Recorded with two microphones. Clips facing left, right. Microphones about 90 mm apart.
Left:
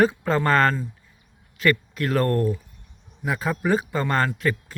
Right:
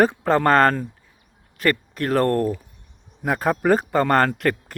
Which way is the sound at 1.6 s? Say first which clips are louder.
Even; 45° right (ahead or behind).